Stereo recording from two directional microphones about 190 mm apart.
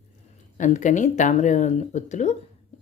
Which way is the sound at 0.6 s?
40° left (ahead or behind).